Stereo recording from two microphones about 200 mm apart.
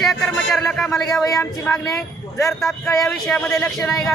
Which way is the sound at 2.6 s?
Centre (ahead or behind).